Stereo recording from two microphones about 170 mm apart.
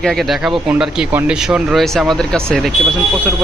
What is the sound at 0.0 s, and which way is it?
Speech, centre (ahead or behind).